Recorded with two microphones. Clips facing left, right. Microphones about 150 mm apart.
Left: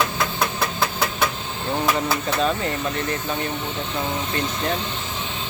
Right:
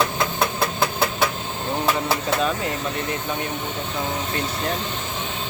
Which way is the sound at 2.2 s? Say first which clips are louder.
Even; 5° right (ahead or behind).